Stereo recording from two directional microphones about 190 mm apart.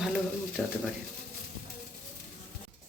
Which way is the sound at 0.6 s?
5° left (ahead or behind).